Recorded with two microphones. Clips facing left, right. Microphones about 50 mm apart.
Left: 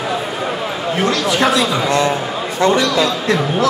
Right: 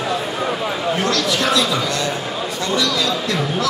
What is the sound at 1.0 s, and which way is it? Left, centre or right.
A man's voice, left.